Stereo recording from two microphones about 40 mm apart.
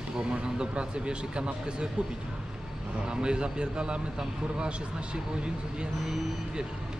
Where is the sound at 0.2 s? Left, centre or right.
Right.